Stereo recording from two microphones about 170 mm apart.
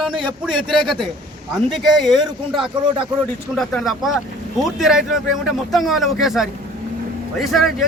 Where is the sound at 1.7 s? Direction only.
Centre (ahead or behind).